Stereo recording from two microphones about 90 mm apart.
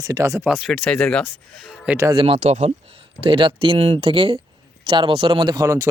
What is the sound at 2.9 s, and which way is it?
Speech, 85° right.